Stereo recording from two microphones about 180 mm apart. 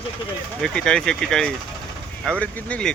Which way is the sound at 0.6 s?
5° left (ahead or behind).